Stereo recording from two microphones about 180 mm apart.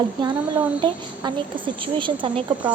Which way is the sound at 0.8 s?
25° right (ahead or behind).